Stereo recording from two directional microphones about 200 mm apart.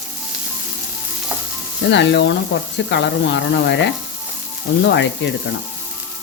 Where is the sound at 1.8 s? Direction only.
60° left (ahead or behind).